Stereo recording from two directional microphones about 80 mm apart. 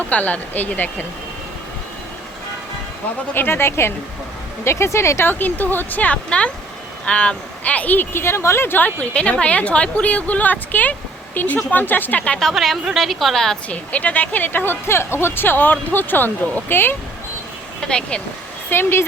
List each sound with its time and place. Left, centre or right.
0.1 s speech: centre
3.3 s speech: left
12.4 s a woman's voice: centre
13.7 s speech: centre
17.7 s speech: centre
18.7 s speech: left